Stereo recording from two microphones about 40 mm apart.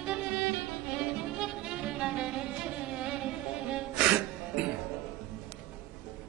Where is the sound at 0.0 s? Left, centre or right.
Right.